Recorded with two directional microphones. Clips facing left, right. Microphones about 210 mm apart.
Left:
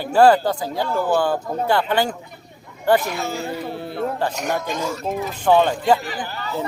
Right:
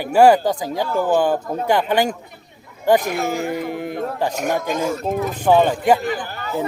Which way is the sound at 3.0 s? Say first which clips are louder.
Right 3 dB; 50° right (ahead or behind).